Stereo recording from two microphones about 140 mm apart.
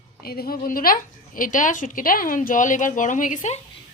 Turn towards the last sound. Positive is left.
turn(degrees=65)  # may be behind; listen again after turning